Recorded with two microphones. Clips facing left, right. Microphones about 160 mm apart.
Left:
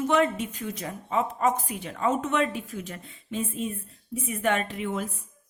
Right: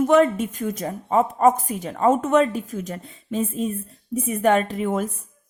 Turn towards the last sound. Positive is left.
turn(degrees=-45)  # may be behind; listen again after turning